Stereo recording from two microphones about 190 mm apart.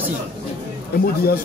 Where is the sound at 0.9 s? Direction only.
55° left (ahead or behind).